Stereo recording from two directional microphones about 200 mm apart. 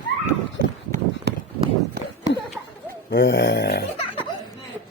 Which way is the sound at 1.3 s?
60° right (ahead or behind).